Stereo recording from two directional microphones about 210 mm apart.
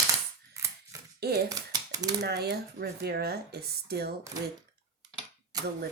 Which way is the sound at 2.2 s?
50° right (ahead or behind).